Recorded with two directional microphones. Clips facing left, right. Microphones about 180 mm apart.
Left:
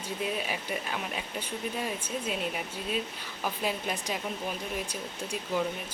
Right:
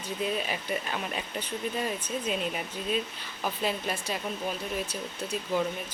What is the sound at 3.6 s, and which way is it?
Speech, 15° left (ahead or behind).